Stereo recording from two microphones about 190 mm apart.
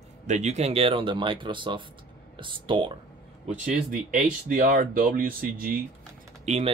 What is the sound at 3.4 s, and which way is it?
Speech, 40° right (ahead or behind).